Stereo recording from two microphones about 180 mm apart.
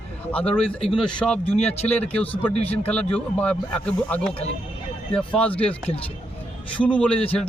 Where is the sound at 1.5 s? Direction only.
35° left (ahead or behind).